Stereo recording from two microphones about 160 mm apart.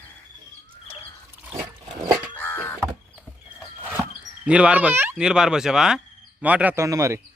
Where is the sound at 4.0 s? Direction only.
5° right (ahead or behind).